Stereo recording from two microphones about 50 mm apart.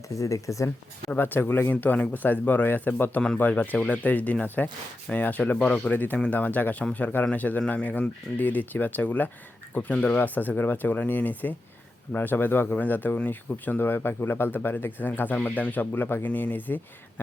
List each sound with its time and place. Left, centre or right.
0.2 s speech: left
1.1 s speech: left
1.7 s speech: left